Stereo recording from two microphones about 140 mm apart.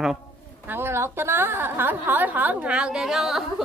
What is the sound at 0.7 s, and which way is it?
A woman's voice, 15° right (ahead or behind).